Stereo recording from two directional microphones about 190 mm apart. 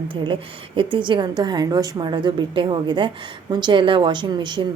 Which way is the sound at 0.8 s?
25° right (ahead or behind).